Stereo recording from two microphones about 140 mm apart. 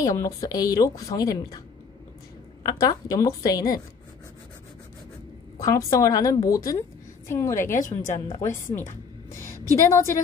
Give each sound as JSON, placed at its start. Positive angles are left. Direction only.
{"t": 0.0, "sound": "a woman's voice", "side_deg": 25}
{"t": 2.6, "sound": "a woman's voice", "side_deg": 30}
{"t": 5.6, "sound": "a woman's voice", "side_deg": 25}
{"t": 9.8, "sound": "a woman's voice", "side_deg": 20}